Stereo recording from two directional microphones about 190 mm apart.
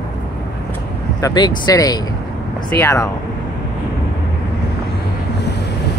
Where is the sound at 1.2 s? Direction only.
20° left (ahead or behind).